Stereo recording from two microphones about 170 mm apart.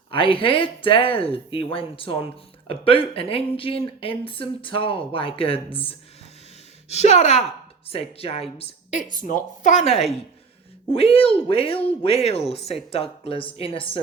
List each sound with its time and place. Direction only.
0.1 s speech: 30° left (ahead or behind)
6.8 s a woman's voice: 40° left (ahead or behind)